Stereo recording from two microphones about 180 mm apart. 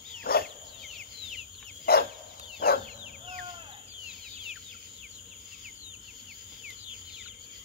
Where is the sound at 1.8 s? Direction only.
60° left (ahead or behind).